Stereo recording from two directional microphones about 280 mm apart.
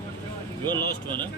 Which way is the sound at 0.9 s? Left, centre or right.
Left.